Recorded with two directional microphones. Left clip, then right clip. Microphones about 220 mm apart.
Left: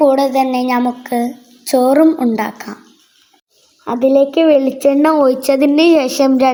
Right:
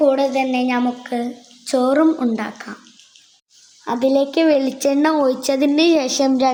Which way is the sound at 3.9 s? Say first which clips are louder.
Left 5 dB; 5° left (ahead or behind).